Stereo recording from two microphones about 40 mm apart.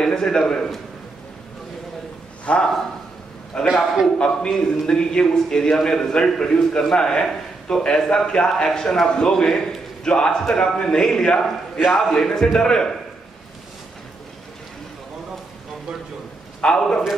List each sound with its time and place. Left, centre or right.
0.0 s a man's voice: centre
2.4 s a man's voice: left
3.7 s a man's voice: centre
4.2 s a man's voice: centre
16.6 s a man's voice: left